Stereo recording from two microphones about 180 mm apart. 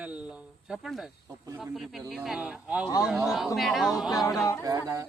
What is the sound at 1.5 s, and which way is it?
Speech, centre (ahead or behind).